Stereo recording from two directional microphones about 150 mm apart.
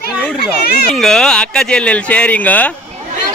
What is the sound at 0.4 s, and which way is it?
Speech, 90° left.